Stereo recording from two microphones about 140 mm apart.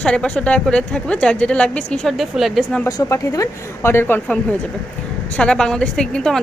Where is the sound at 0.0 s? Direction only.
5° left (ahead or behind).